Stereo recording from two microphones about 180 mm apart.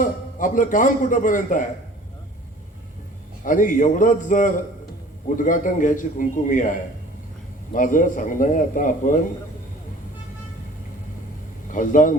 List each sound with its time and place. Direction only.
0.0 s a man's voice: 45° left (ahead or behind)
3.4 s a man's voice: 45° left (ahead or behind)
11.7 s a man's voice: 45° left (ahead or behind)